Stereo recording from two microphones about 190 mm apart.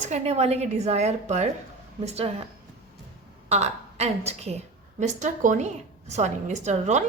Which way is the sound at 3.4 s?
35° right (ahead or behind).